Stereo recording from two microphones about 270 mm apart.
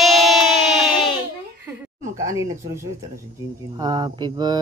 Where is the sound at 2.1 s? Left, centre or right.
Centre.